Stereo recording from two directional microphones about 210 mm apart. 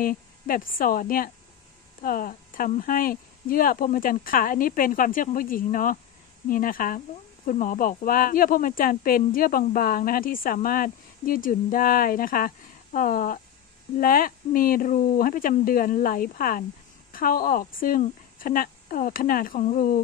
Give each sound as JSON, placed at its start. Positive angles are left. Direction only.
{"t": 0.0, "sound": "a woman's voice", "side_deg": 40}